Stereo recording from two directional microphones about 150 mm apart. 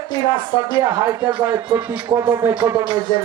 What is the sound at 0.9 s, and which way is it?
Speech, 25° right (ahead or behind).